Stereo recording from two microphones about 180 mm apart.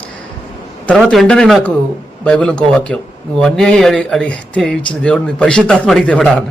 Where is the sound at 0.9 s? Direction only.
Centre (ahead or behind).